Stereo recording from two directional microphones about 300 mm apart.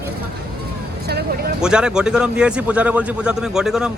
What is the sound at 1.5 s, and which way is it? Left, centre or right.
A man's voice, centre.